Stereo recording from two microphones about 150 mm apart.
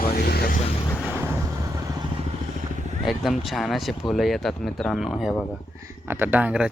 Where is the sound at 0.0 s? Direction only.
90° left.